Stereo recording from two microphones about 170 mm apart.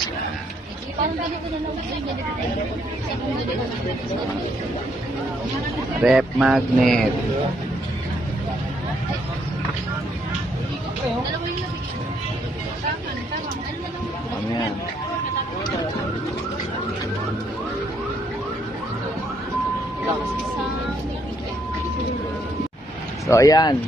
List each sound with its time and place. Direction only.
5.9 s speech: 5° right (ahead or behind)
23.2 s speech: 20° left (ahead or behind)